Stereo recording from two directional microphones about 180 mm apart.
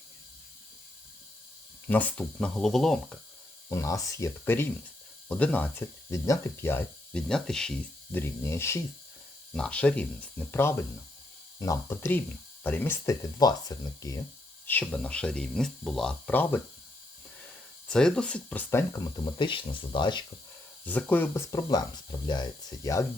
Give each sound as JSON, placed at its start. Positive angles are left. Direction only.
{"t": 1.9, "sound": "speech", "side_deg": 10}
{"t": 3.7, "sound": "speech", "side_deg": 15}
{"t": 14.7, "sound": "speech", "side_deg": 10}
{"t": 17.8, "sound": "speech", "side_deg": 5}
{"t": 20.8, "sound": "speech", "side_deg": 10}